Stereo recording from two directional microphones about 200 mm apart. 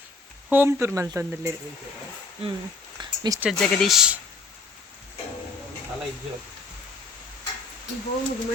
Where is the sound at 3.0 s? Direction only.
20° right (ahead or behind).